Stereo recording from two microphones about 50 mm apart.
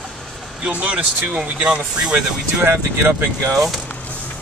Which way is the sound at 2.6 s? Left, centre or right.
Right.